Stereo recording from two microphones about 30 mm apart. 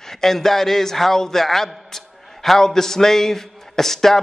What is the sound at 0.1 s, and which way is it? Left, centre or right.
A man's voice, centre.